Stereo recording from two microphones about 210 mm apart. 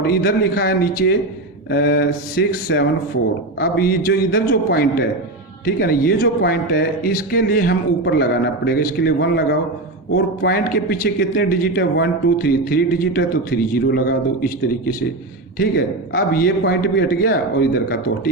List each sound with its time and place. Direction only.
0.0 s speech: 50° left (ahead or behind)
15.5 s speech: 45° left (ahead or behind)